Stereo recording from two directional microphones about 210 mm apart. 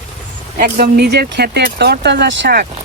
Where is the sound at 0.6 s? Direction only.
50° right (ahead or behind).